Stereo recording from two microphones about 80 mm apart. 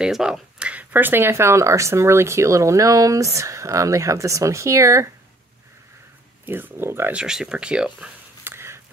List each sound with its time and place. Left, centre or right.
0.0 s speech: centre; by 5.1 s right
6.4 s speech: right
7.1 s speech: centre
8.5 s a sound: right